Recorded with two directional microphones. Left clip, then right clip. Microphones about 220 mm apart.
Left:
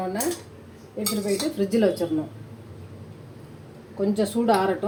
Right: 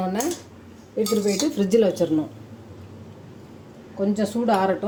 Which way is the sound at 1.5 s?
45° right (ahead or behind).